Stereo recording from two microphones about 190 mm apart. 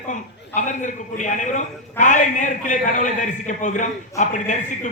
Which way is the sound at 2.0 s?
40° left (ahead or behind).